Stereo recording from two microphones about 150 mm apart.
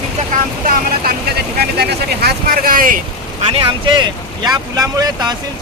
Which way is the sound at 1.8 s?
90° right.